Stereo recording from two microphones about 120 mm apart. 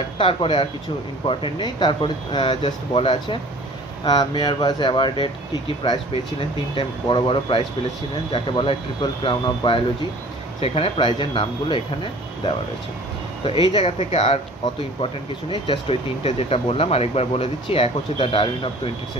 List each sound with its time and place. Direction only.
0.2 s speech: 50° left (ahead or behind)
10.6 s speech: 55° left (ahead or behind)
13.8 s speech: 60° left (ahead or behind)
15.5 s speech: 45° left (ahead or behind)